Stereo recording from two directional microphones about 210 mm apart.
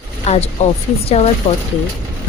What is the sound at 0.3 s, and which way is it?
Speech, 30° left (ahead or behind).